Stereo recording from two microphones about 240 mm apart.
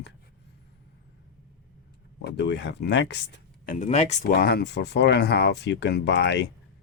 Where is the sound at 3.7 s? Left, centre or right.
Left.